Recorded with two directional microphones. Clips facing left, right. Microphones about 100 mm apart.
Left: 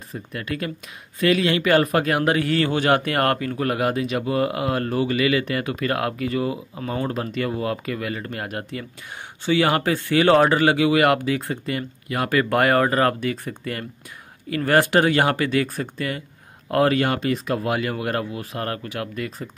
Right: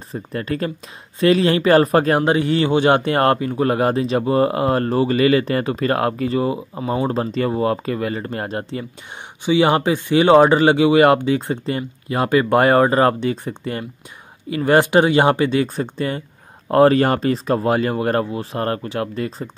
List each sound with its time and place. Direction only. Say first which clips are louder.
0.1 s a man's voice: right 5 dB; 35° right (ahead or behind)
9.4 s a man's voice: right 4 dB; 20° right (ahead or behind)